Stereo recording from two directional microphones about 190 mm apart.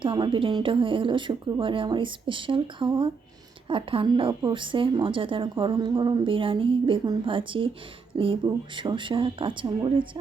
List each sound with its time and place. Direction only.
0.0 s a woman's voice: 25° right (ahead or behind)